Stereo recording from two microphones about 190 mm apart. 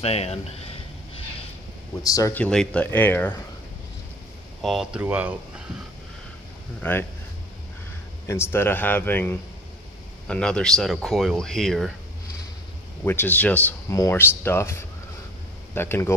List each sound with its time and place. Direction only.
0.0 s a sound: 35° left (ahead or behind)
2.0 s speech: 15° left (ahead or behind)
4.6 s speech: centre (ahead or behind)
6.8 s speech: 10° left (ahead or behind)
8.3 s speech: 15° left (ahead or behind)
13.0 s speech: 10° left (ahead or behind)